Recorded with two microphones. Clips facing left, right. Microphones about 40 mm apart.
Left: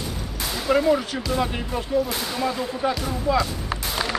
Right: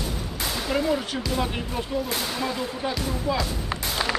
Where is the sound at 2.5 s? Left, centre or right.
Left.